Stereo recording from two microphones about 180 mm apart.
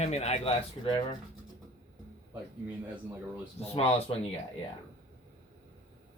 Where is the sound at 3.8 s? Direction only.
35° left (ahead or behind).